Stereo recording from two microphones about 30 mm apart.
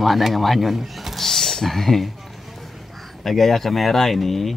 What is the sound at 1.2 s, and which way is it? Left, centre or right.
Speech, centre.